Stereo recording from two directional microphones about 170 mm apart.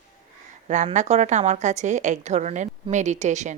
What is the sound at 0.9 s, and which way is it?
A woman's voice, 40° right (ahead or behind).